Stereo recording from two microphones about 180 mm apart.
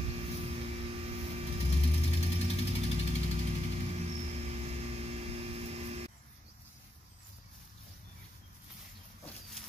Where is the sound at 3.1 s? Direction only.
35° right (ahead or behind).